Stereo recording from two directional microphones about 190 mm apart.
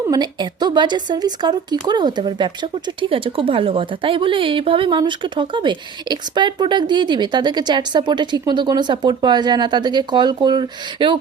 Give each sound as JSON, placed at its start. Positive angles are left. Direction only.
{"t": 0.1, "sound": "speech", "side_deg": -20}